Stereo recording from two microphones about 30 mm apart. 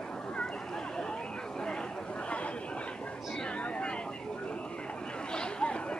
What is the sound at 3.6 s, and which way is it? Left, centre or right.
Vehicle, left.